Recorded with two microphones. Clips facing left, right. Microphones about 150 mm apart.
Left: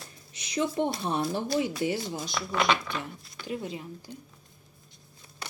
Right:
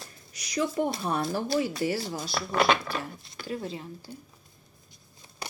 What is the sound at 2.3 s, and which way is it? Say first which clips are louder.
Speech: right 3 dB; 35° right (ahead or behind).